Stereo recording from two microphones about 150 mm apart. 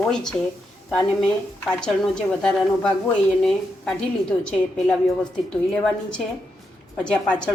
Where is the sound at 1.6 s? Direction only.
5° left (ahead or behind).